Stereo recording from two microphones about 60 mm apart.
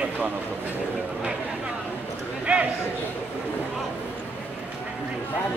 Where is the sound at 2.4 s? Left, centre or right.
Right.